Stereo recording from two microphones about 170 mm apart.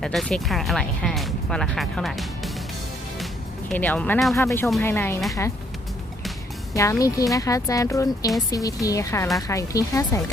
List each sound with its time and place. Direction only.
0.0 s speech: centre (ahead or behind)
3.7 s speech: 10° left (ahead or behind)
4.4 s speech: 15° left (ahead or behind)
6.7 s speech: 20° left (ahead or behind)